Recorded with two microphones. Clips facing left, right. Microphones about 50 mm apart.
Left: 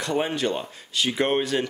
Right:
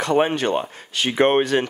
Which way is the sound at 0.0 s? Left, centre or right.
Right.